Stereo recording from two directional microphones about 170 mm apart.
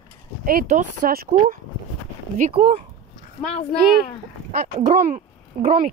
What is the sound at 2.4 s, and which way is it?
Speech, 45° right (ahead or behind).